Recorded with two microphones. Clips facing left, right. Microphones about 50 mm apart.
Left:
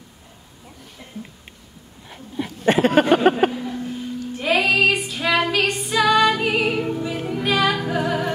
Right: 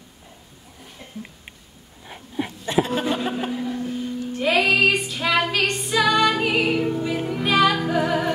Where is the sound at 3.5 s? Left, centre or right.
Centre.